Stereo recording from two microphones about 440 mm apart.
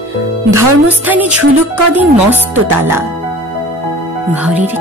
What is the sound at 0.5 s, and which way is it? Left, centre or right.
Speech, centre.